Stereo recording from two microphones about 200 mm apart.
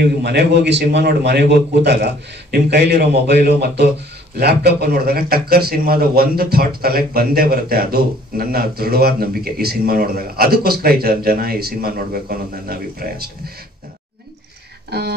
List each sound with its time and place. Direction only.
0.0 s a man's voice: 55° right (ahead or behind)
14.9 s speech: 55° right (ahead or behind)